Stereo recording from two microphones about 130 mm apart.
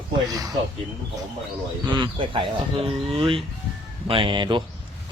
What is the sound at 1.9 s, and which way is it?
Speech, 40° right (ahead or behind).